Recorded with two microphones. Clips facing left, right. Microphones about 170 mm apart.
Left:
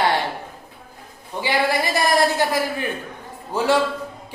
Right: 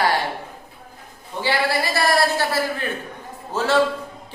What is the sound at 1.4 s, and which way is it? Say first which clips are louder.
Speech: left 1 dB; 15° left (ahead or behind).